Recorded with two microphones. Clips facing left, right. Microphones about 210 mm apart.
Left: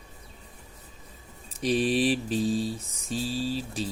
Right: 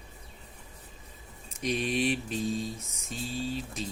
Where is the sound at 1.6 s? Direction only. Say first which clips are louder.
Left 5 dB; 35° left (ahead or behind).